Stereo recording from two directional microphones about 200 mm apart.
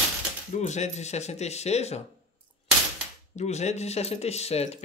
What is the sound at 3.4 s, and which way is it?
Speech, 35° left (ahead or behind).